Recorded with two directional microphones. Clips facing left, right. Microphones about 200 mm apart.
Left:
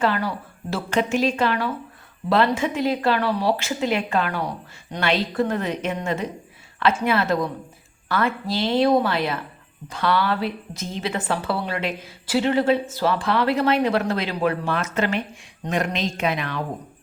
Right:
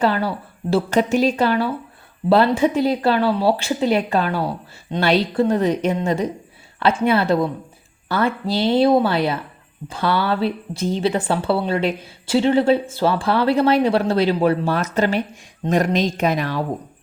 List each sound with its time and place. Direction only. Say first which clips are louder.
0.0 s speech: right 3 dB; 30° right (ahead or behind)
1.1 s a woman's voice: right 4 dB; centre (ahead or behind)
1.4 s speech: right 4 dB; 30° right (ahead or behind)